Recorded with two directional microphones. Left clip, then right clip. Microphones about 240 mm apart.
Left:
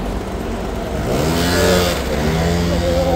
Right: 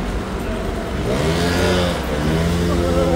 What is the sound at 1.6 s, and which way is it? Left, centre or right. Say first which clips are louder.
Vehicle: left 6 dB; left.